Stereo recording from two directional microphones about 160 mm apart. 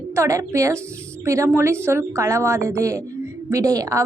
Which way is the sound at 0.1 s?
20° right (ahead or behind).